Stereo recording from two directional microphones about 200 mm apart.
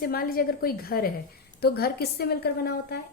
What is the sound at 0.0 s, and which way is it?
A woman's voice, 45° left (ahead or behind).